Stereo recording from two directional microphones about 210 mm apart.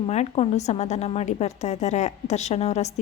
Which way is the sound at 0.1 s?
30° left (ahead or behind).